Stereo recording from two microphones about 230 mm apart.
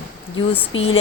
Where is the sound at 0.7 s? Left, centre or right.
Left.